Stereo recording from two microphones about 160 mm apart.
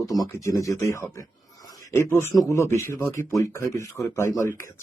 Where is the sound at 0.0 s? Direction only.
20° left (ahead or behind).